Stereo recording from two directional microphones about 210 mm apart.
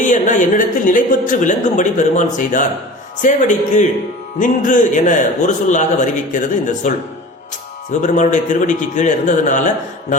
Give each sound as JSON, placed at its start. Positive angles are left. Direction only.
{"t": 0.0, "sound": "speech", "side_deg": 35}
{"t": 8.0, "sound": "speech", "side_deg": 35}